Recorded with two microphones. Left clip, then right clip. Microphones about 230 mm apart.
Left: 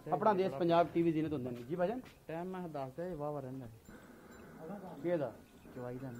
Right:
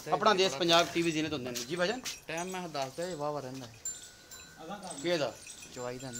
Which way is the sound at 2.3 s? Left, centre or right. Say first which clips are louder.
Right 4 dB; centre.